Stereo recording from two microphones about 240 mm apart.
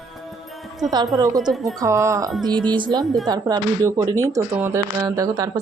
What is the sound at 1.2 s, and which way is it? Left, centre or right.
Speech, centre.